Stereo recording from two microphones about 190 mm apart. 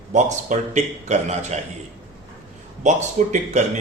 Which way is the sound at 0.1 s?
40° right (ahead or behind).